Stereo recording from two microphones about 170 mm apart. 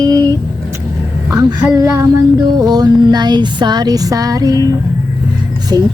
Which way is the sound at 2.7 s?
25° right (ahead or behind).